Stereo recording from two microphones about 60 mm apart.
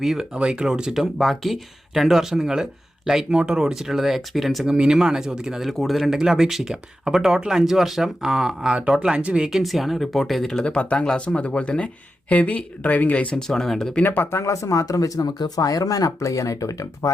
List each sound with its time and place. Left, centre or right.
0.0 s speech: centre
0.3 s speech: centre
4.7 s speech: centre
5.7 s speech: centre
9.0 s speech: centre
9.5 s speech: centre
10.6 s speech: centre
13.3 s speech: centre
14.0 s speech: left
14.3 s speech: left